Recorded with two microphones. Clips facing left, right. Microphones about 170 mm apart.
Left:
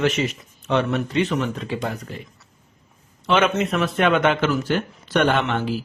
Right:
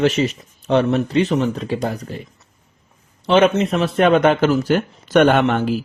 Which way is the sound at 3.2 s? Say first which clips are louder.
Right 5 dB; 35° right (ahead or behind).